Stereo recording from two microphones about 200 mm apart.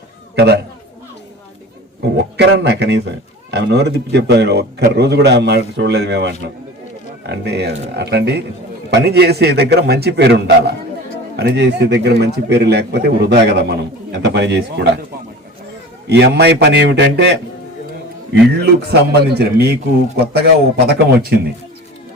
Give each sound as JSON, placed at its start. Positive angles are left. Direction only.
{"t": 0.3, "sound": "a man's voice", "side_deg": -55}
{"t": 2.0, "sound": "a man's voice", "side_deg": -60}
{"t": 16.0, "sound": "speech", "side_deg": -55}
{"t": 18.6, "sound": "speech", "side_deg": -55}